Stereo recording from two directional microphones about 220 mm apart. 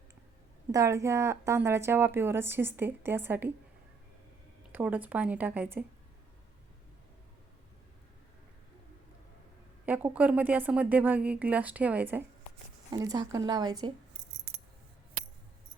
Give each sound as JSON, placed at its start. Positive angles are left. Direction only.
{"t": 0.7, "sound": "a woman's voice", "side_deg": -15}
{"t": 4.7, "sound": "a woman's voice", "side_deg": -5}
{"t": 9.8, "sound": "a woman's voice", "side_deg": -5}